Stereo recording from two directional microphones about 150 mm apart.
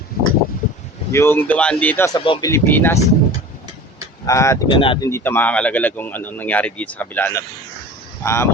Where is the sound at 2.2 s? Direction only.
35° left (ahead or behind).